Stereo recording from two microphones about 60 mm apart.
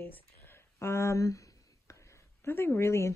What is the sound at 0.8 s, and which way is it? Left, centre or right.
Speech, left.